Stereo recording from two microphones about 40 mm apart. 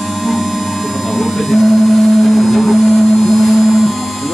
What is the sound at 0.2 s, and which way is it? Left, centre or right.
Music, centre.